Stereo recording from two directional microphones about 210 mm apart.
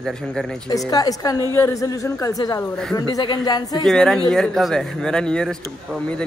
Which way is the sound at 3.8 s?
Centre (ahead or behind).